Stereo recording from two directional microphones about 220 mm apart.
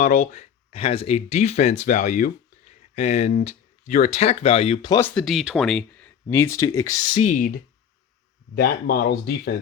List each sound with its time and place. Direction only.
0.0 s speech: 35° left (ahead or behind); by 7.2 s 15° left (ahead or behind)
7.2 s speech: 35° left (ahead or behind)